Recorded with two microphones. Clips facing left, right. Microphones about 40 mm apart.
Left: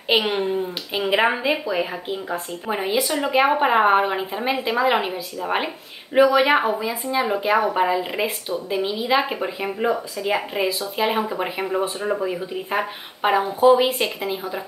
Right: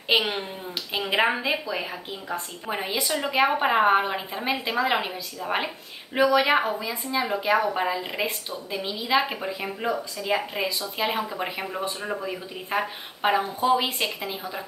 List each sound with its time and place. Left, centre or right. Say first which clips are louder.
0.2 s speech: left 7 dB; centre